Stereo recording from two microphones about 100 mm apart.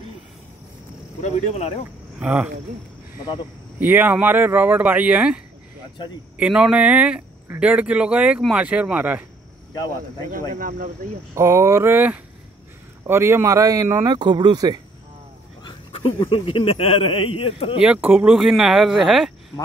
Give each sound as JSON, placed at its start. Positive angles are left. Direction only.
{"t": 2.1, "sound": "speech", "side_deg": -15}
{"t": 3.8, "sound": "speech", "side_deg": -20}
{"t": 9.8, "sound": "speech", "side_deg": 45}
{"t": 11.3, "sound": "speech", "side_deg": -30}
{"t": 14.1, "sound": "speech", "side_deg": -50}
{"t": 15.6, "sound": "dog", "side_deg": 50}
{"t": 16.2, "sound": "speech", "side_deg": 65}
{"t": 17.7, "sound": "speech", "side_deg": -10}